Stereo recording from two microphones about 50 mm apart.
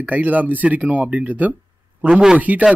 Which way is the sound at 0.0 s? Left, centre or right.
Right.